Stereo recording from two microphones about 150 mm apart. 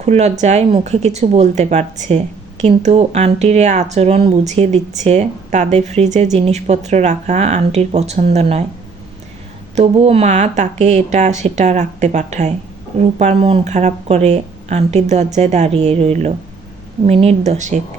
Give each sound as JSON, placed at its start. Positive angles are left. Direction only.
{"t": 0.0, "sound": "speech", "side_deg": -50}
{"t": 9.7, "sound": "speech", "side_deg": -45}